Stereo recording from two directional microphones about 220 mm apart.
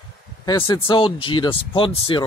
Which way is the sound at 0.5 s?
20° left (ahead or behind).